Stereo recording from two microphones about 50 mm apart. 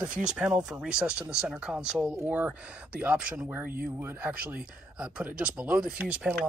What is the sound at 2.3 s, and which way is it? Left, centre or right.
Speech, right.